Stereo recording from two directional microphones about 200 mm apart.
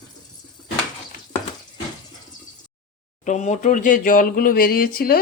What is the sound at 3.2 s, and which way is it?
Speech, 35° left (ahead or behind).